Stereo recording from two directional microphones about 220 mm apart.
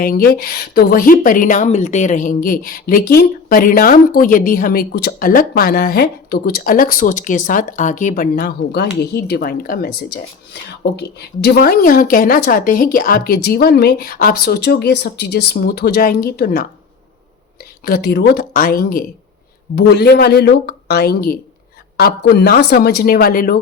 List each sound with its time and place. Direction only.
0.0 s a woman's voice: 45° left (ahead or behind)
17.8 s a woman's voice: 45° left (ahead or behind)